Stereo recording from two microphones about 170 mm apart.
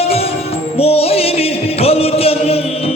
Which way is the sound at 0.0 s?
35° left (ahead or behind).